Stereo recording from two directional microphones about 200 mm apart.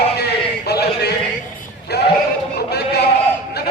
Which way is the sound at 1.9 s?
55° left (ahead or behind).